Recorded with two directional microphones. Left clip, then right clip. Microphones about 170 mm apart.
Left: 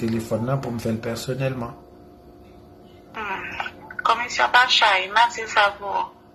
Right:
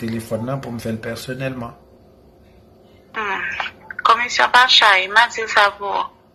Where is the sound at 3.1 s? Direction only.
20° right (ahead or behind).